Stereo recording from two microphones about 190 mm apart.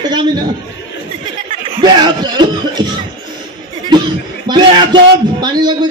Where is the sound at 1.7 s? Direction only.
25° right (ahead or behind).